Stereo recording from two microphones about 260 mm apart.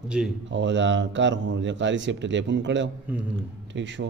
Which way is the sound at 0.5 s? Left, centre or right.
Right.